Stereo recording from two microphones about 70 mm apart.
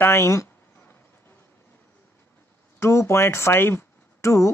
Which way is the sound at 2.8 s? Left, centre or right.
Left.